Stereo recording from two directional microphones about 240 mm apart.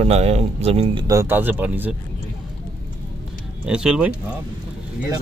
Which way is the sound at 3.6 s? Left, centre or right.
Centre.